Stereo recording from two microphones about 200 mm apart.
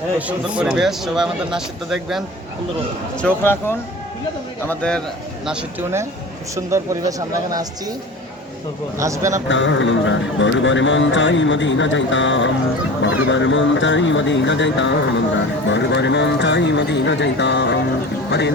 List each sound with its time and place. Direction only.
0.2 s speech: 5° right (ahead or behind)
3.2 s speech: 10° left (ahead or behind)
5.5 s speech: 15° right (ahead or behind)
9.0 s speech: 15° right (ahead or behind)
9.5 s speech: 70° left (ahead or behind)